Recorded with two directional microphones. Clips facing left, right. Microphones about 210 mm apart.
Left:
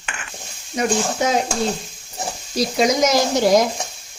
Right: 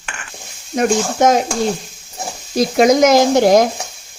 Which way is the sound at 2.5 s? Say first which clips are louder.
Right 6 dB; 55° right (ahead or behind).